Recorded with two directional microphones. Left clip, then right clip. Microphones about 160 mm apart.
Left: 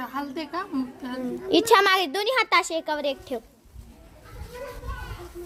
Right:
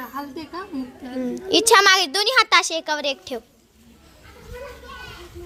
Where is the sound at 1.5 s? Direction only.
5° left (ahead or behind).